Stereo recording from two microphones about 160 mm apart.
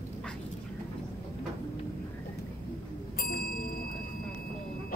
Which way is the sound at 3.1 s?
70° left (ahead or behind).